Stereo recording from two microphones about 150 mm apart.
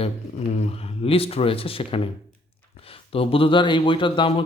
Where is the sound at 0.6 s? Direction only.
40° left (ahead or behind).